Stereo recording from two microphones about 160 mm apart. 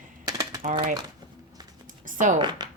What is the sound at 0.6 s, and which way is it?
Speech, 50° right (ahead or behind).